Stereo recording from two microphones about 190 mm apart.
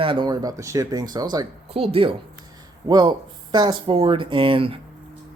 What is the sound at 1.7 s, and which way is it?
A woman's voice, 30° right (ahead or behind).